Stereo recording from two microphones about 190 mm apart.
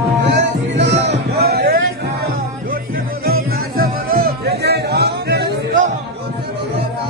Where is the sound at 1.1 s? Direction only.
55° right (ahead or behind).